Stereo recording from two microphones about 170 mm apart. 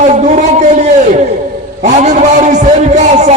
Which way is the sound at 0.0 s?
45° right (ahead or behind).